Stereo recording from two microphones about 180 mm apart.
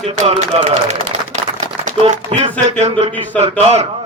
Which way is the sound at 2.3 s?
40° right (ahead or behind).